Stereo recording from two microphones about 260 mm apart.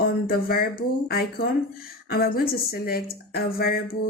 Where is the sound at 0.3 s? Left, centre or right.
Left.